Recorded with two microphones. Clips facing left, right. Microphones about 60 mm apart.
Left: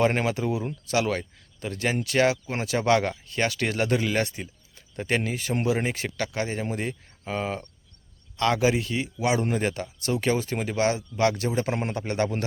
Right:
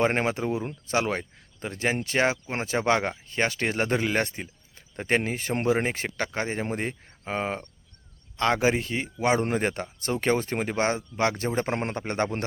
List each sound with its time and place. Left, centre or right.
0.0 s speech: right